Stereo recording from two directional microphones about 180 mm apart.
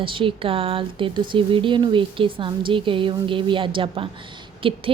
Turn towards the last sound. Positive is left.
turn(degrees=-30)  # may be behind; listen again after turning